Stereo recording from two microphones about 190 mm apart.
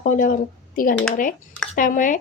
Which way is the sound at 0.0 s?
45° left (ahead or behind).